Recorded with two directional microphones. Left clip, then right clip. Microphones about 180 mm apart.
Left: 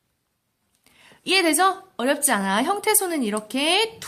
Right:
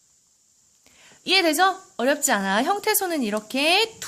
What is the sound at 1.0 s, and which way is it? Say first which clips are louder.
A woman's voice: even; 30° right (ahead or behind).